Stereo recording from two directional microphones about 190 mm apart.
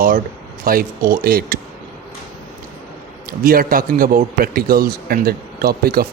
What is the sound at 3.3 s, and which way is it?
A man's voice, 50° right (ahead or behind).